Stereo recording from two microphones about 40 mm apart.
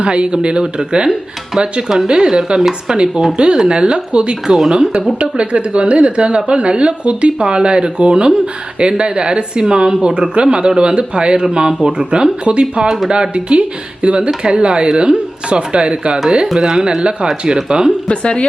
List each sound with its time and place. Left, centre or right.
0.0 s a woman's voice: right; by 2.9 s centre
3.3 s a woman's voice: right
4.5 s a woman's voice: centre
18.1 s a woman's voice: left